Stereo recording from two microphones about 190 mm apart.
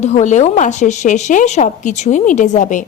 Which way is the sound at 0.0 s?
40° left (ahead or behind).